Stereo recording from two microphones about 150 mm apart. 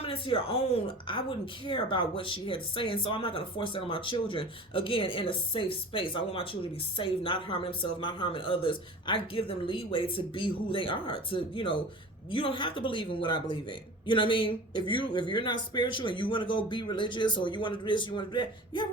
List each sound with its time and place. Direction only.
0.0 s speech: 35° left (ahead or behind)